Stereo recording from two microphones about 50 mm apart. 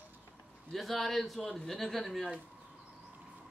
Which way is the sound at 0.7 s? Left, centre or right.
Centre.